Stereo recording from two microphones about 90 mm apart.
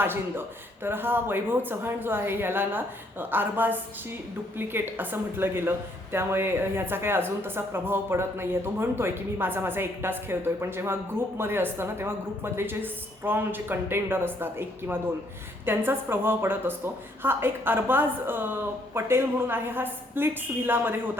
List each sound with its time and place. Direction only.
0.0 s a woman's voice: 25° right (ahead or behind)